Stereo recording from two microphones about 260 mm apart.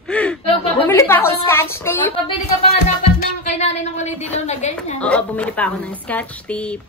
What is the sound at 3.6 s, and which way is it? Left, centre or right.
Speech, left.